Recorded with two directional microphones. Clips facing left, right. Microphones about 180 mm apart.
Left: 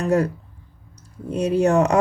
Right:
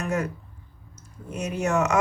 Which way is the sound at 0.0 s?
35° left (ahead or behind).